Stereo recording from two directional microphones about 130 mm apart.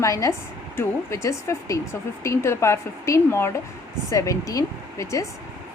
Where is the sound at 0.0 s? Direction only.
25° left (ahead or behind).